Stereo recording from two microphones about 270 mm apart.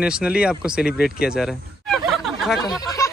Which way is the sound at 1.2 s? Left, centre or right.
Centre.